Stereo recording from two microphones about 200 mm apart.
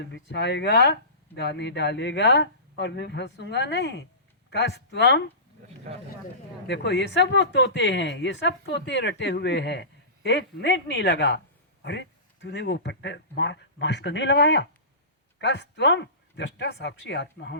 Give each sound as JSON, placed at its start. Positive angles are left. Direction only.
{"t": 0.0, "sound": "speech", "side_deg": 60}
{"t": 6.7, "sound": "speech", "side_deg": 60}